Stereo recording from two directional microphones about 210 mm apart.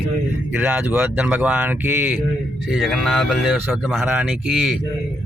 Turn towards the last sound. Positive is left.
turn(degrees=0)  # may be behind; listen again after turning